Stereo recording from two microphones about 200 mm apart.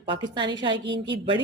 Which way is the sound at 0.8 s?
60° right (ahead or behind).